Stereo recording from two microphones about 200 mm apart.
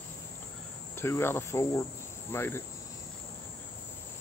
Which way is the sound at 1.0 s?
10° left (ahead or behind).